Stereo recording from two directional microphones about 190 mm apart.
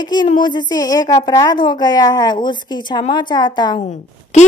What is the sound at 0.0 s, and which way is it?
A woman's voice, 25° left (ahead or behind).